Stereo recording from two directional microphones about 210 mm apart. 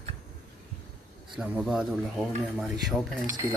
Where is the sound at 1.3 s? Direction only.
5° right (ahead or behind).